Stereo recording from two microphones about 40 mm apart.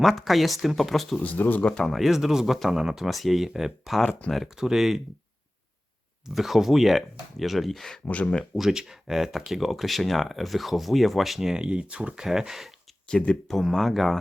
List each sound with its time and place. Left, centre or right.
0.0 s speech: centre
1.2 s speech: left
1.8 s speech: centre
6.2 s speech: centre
8.0 s speech: left
8.7 s speech: centre
11.5 s speech: right
12.1 s speech: centre
13.1 s speech: left
13.5 s speech: centre